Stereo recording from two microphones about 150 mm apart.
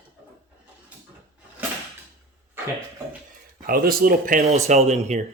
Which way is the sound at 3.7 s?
75° right (ahead or behind).